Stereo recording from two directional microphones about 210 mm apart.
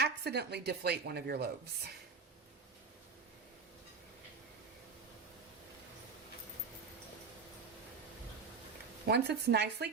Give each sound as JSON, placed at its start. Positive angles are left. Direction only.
{"t": 0.0, "sound": "a woman's voice", "side_deg": -50}
{"t": 9.0, "sound": "a woman's voice", "side_deg": -50}